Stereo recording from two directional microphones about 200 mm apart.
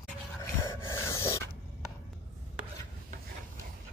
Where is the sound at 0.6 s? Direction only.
15° left (ahead or behind).